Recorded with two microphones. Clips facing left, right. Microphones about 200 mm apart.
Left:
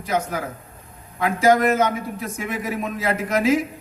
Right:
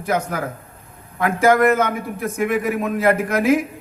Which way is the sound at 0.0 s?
55° right (ahead or behind).